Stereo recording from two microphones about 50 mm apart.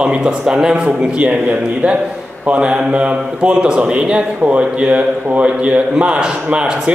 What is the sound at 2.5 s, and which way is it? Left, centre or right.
Speech, right.